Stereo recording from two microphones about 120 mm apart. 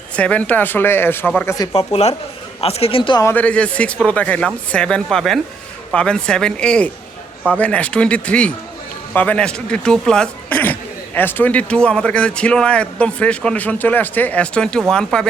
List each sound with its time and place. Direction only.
0.2 s speech: 10° left (ahead or behind)
1.7 s a woman's voice: 60° left (ahead or behind)
3.3 s speech: 10° left (ahead or behind)